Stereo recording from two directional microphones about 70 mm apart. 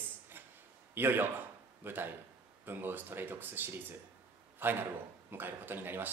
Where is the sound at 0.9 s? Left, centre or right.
Right.